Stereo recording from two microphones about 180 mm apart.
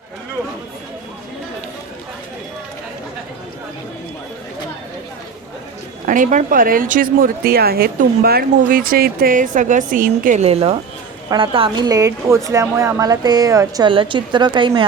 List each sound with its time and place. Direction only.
6.1 s a woman's voice: 45° right (ahead or behind); by 14.8 s 25° right (ahead or behind)